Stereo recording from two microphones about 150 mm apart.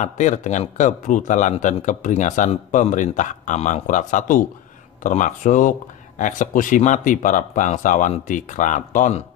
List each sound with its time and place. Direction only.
0.0 s speech: 55° left (ahead or behind)